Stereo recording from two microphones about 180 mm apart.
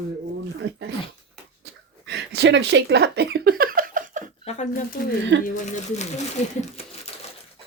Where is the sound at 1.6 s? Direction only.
70° right (ahead or behind); by 4.3 s 45° right (ahead or behind).